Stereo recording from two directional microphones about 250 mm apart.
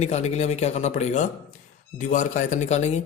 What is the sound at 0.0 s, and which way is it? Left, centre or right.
A man's voice, left.